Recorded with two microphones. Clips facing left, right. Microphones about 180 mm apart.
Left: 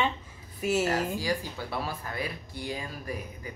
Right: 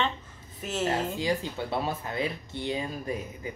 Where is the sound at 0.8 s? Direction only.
25° right (ahead or behind).